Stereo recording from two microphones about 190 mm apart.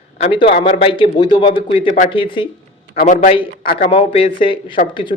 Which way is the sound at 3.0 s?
45° left (ahead or behind).